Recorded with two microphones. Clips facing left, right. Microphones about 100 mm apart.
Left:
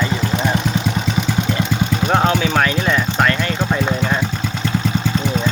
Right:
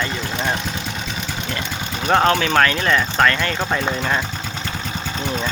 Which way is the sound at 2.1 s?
5° left (ahead or behind).